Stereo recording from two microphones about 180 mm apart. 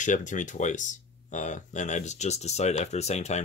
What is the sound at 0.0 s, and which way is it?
Speech, 45° left (ahead or behind).